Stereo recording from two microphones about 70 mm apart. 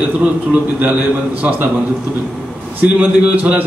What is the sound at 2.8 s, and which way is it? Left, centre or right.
Speech, right.